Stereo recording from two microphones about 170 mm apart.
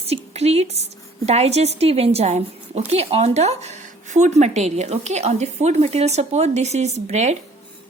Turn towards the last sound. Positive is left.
turn(degrees=-40)  # may be behind; listen again after turning